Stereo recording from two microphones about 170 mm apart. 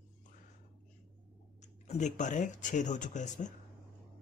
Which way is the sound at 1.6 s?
45° left (ahead or behind).